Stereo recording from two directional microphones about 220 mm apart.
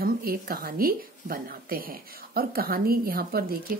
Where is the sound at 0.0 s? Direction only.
40° right (ahead or behind).